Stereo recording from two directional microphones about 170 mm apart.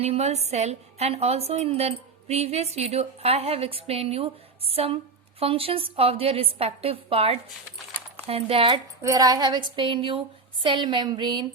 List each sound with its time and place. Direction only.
0.0 s a woman's voice: 40° right (ahead or behind)
9.0 s speech: 20° right (ahead or behind)